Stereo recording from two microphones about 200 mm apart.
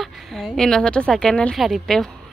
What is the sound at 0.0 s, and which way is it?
Speech, centre (ahead or behind).